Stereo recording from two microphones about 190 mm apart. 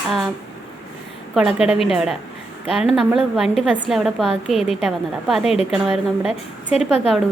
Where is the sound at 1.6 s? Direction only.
30° left (ahead or behind).